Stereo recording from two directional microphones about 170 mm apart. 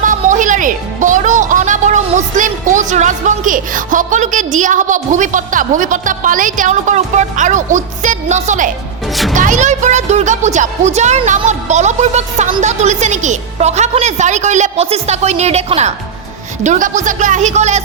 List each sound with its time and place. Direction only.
0.0 s a woman's voice: 50° right (ahead or behind)